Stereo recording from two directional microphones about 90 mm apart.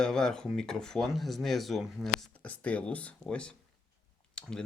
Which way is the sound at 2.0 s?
15° left (ahead or behind).